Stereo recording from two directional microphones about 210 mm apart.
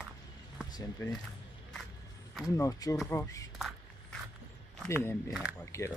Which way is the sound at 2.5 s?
15° left (ahead or behind).